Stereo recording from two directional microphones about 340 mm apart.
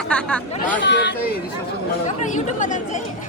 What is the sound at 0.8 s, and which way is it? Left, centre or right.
Speech, left.